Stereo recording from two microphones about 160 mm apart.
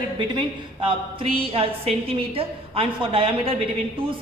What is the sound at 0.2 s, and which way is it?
A woman's voice, 30° right (ahead or behind).